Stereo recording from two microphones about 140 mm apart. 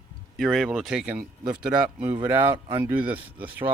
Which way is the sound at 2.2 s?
10° right (ahead or behind).